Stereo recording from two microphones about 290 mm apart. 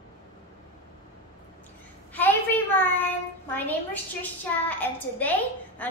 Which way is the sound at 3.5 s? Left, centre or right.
Centre.